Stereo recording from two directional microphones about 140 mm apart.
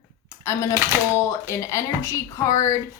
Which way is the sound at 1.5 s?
20° left (ahead or behind).